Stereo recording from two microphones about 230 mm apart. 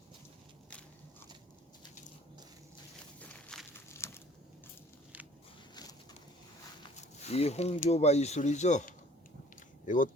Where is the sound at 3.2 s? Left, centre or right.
Centre.